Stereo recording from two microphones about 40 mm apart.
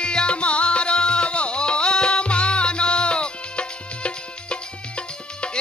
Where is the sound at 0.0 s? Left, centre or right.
Left.